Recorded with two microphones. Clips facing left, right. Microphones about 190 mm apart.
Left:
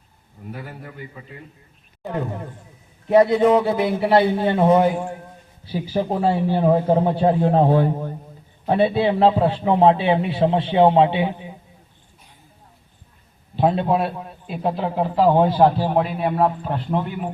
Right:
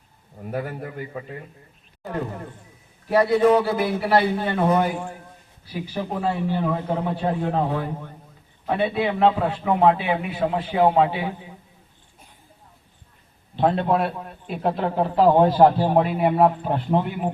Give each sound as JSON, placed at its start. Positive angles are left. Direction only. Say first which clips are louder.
{"t": 2.0, "sound": "a man's voice", "louder": "left 3 dB", "side_deg": 0}
{"t": 3.1, "sound": "a man's voice", "louder": "left 2 dB", "side_deg": 20}
{"t": 13.6, "sound": "a man's voice", "louder": "left 1 dB", "side_deg": 10}
{"t": 15.9, "sound": "speech", "louder": "right 1 dB", "side_deg": -10}